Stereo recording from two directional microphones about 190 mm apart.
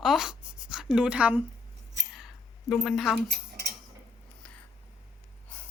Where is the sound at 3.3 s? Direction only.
55° right (ahead or behind).